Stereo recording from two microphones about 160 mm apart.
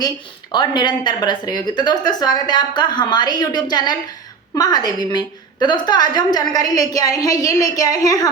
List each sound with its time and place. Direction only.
0.5 s a woman's voice: 30° left (ahead or behind)